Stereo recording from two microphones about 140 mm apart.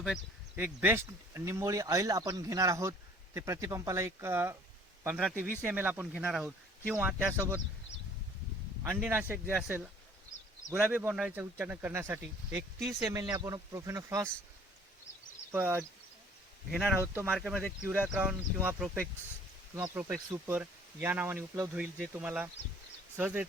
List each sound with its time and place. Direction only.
0.5 s speech: 15° right (ahead or behind)
8.9 s speech: 10° right (ahead or behind)
15.5 s speech: 15° right (ahead or behind)
17.0 s speech: 15° right (ahead or behind)
17.3 s speech: 5° right (ahead or behind)
19.7 s speech: 25° right (ahead or behind)